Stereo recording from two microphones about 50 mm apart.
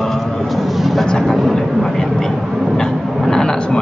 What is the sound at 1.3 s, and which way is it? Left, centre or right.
A man's voice, centre.